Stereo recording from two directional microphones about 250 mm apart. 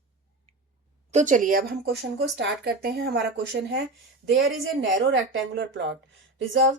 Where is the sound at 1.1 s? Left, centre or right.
Right.